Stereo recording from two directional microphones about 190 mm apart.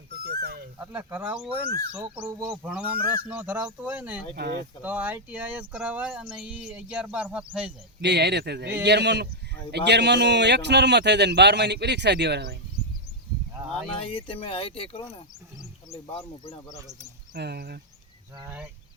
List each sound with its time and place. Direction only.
0.1 s dog: 55° right (ahead or behind)
0.8 s speech: 10° right (ahead or behind)
4.4 s a man's voice: 60° right (ahead or behind)
4.8 s speech: 10° right (ahead or behind)
8.0 s a man's voice: 60° right (ahead or behind)
13.6 s a sound: 20° right (ahead or behind)
14.1 s speech: 30° left (ahead or behind)
17.3 s a man's voice: 60° right (ahead or behind)
18.4 s speech: 10° right (ahead or behind)